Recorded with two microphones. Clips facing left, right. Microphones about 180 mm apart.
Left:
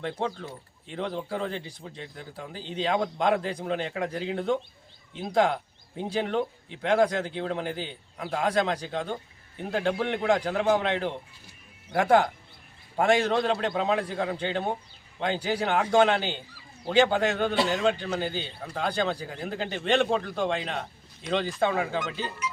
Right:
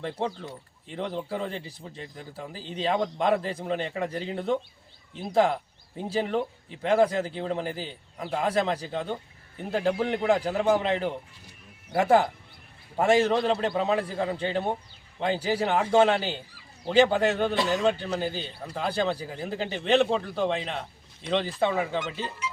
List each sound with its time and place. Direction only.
0.9 s speech: centre (ahead or behind)
22.4 s speech: 25° right (ahead or behind)